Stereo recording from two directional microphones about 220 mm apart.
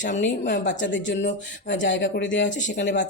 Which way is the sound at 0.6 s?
55° left (ahead or behind).